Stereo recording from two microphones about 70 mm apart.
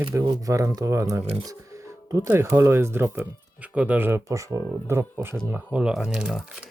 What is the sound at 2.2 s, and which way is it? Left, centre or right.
Speech, right.